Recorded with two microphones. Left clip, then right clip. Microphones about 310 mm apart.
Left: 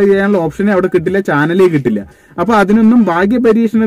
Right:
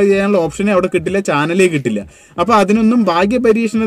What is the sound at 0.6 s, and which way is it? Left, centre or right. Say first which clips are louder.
Speech: left 2 dB; centre.